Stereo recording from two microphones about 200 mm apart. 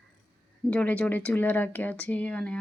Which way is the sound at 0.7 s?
5° left (ahead or behind).